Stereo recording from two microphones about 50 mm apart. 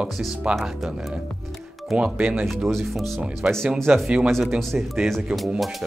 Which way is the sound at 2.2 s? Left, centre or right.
Right.